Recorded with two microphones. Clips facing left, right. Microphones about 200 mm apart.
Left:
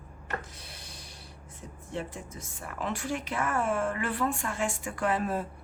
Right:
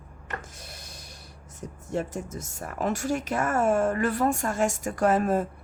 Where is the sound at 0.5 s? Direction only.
45° right (ahead or behind).